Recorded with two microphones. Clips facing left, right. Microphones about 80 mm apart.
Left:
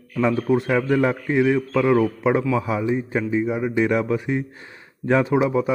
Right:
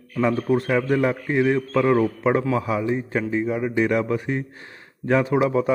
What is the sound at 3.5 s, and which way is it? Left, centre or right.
Speech, centre.